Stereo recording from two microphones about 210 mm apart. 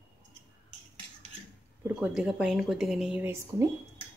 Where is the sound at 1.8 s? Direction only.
5° right (ahead or behind).